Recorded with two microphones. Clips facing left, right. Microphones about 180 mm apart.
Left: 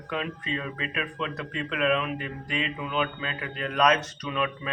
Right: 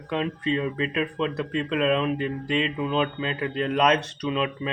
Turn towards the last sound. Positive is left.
turn(degrees=-25)  # may be behind; listen again after turning